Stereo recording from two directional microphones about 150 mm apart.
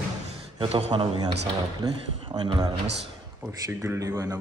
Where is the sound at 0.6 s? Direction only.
40° right (ahead or behind).